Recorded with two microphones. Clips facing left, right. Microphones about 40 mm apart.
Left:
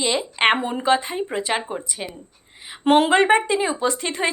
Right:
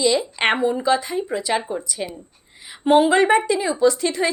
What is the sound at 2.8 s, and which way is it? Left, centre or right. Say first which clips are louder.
Speech: right 1 dB; left.